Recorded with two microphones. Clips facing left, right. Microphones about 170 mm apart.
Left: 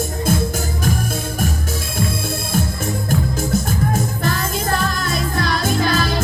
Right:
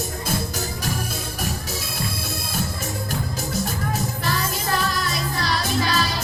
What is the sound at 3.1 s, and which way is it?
Music, 50° left (ahead or behind).